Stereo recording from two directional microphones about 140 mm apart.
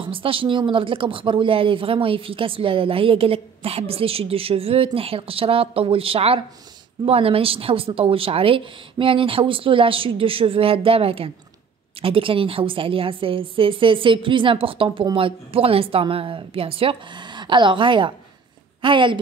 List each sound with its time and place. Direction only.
0.0 s a woman's voice: 40° right (ahead or behind)